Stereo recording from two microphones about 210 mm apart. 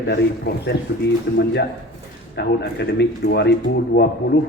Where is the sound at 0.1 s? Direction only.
50° left (ahead or behind).